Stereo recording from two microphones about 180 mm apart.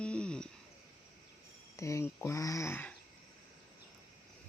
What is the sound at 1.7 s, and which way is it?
Speech, 15° left (ahead or behind).